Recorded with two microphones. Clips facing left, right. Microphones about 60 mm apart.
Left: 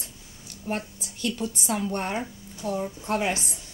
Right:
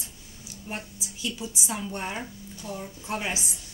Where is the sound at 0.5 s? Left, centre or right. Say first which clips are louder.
Left 6 dB; left.